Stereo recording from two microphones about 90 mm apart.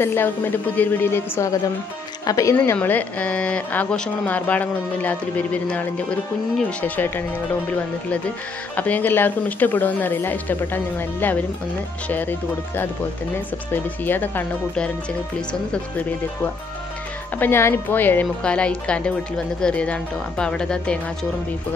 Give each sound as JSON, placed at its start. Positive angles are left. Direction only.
{"t": 0.0, "sound": "speech", "side_deg": 25}
{"t": 2.2, "sound": "speech", "side_deg": 40}
{"t": 2.5, "sound": "a woman's voice", "side_deg": 25}
{"t": 8.7, "sound": "speech", "side_deg": 20}
{"t": 17.4, "sound": "a woman's voice", "side_deg": 25}